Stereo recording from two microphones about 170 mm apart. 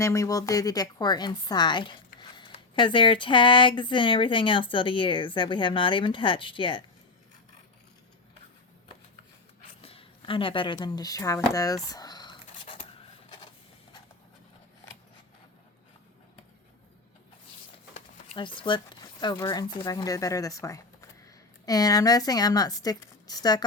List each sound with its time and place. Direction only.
0.0 s speech: 20° left (ahead or behind)
9.8 s a sound: 35° left (ahead or behind)
18.3 s speech: 30° left (ahead or behind)